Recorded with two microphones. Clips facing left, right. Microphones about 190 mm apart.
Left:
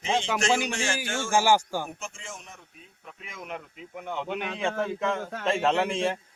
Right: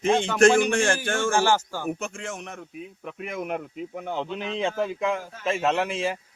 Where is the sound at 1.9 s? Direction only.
65° right (ahead or behind).